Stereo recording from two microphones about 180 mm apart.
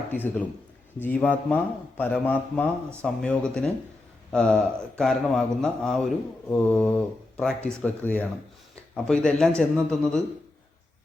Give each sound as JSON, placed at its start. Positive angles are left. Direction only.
{"t": 0.1, "sound": "a man's voice", "side_deg": 10}